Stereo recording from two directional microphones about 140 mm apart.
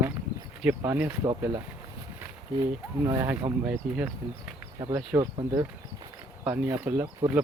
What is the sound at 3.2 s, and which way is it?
Speech, 15° right (ahead or behind).